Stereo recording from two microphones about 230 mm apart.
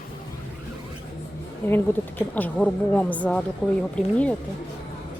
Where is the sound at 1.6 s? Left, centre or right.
Centre.